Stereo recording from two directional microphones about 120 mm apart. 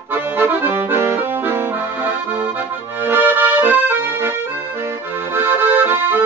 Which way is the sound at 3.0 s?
15° right (ahead or behind).